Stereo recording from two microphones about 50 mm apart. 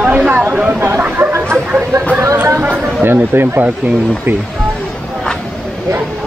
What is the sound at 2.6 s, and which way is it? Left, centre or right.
Speech, right.